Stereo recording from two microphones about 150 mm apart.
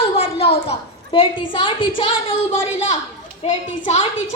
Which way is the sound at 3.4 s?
50° left (ahead or behind).